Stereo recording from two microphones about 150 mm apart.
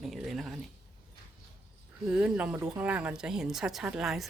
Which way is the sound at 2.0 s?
5° right (ahead or behind).